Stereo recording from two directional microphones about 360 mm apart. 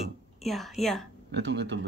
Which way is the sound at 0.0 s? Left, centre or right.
Centre.